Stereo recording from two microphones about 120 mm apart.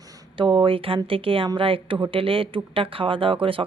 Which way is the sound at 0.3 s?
45° right (ahead or behind).